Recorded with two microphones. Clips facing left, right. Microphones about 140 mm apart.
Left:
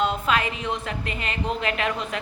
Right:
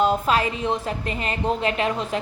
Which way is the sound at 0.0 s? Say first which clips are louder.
Right 3 dB; 35° right (ahead or behind).